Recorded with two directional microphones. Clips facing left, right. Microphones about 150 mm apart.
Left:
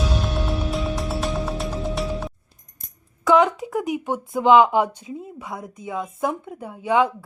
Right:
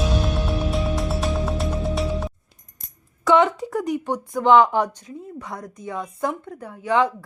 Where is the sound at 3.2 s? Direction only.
Centre (ahead or behind).